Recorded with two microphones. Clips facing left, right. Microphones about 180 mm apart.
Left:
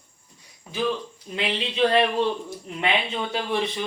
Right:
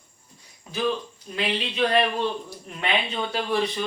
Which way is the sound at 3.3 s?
20° left (ahead or behind).